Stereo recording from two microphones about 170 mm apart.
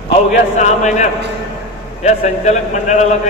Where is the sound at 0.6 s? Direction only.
45° left (ahead or behind).